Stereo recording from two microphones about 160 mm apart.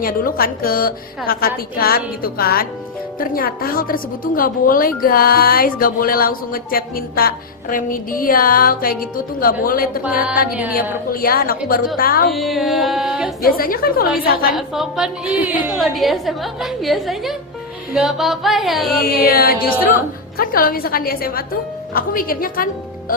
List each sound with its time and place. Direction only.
0.0 s a woman's voice: 65° left (ahead or behind)
11.1 s a woman's voice: 65° left (ahead or behind)
12.3 s a woman's voice: centre (ahead or behind)
13.4 s a woman's voice: 65° left (ahead or behind)
14.5 s a woman's voice: 5° right (ahead or behind)
19.2 s a woman's voice: 70° left (ahead or behind)